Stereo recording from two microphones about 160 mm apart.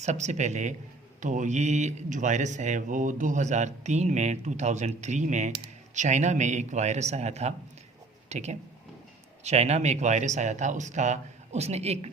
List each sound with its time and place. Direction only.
0.0 s speech: 45° right (ahead or behind)